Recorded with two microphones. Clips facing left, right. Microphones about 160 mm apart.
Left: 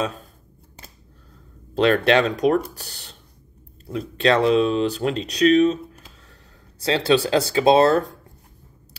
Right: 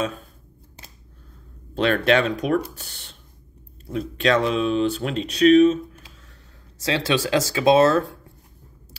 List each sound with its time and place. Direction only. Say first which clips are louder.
1.8 s speech: left 2 dB; 35° left (ahead or behind)
4.2 s speech: left 3 dB; 35° left (ahead or behind)
7.1 s speech: left 4 dB; 35° left (ahead or behind)